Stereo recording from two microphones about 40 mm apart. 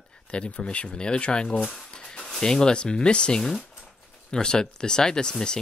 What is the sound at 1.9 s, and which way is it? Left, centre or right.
Music, centre.